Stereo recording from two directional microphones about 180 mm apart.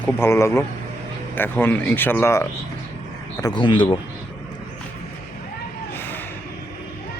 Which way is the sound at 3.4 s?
25° left (ahead or behind).